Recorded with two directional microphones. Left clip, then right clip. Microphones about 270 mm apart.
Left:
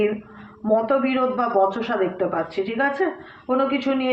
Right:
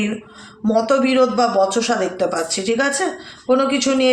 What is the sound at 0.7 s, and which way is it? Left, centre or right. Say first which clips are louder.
A woman's voice: right 3 dB; right.